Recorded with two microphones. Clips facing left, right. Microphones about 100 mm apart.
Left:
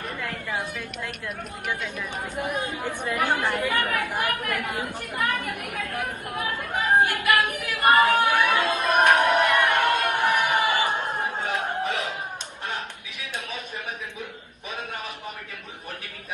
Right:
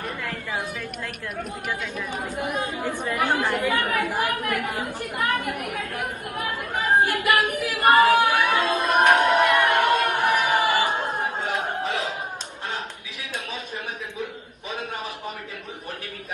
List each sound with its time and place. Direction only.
2.3 s a woman's voice: 15° right (ahead or behind)
2.8 s speech: 20° left (ahead or behind)
3.2 s a woman's voice: 15° right (ahead or behind)
5.5 s speech: 50° right (ahead or behind)
6.5 s a woman's voice: 15° right (ahead or behind)
8.0 s chatter: 15° right (ahead or behind)
8.4 s a sound: 15° right (ahead or behind)